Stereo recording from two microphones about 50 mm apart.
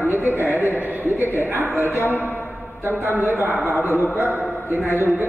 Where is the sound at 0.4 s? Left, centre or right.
Right.